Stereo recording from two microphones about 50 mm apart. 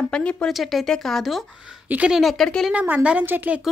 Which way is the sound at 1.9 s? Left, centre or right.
Right.